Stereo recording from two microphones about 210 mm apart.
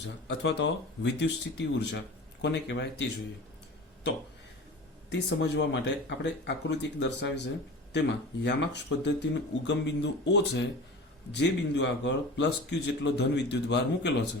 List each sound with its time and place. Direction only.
0.3 s a man's voice: 60° left (ahead or behind)
5.4 s a man's voice: 55° left (ahead or behind)